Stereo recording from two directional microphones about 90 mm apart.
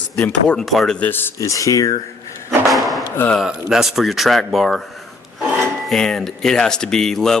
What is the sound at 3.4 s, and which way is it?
Speech, 10° right (ahead or behind).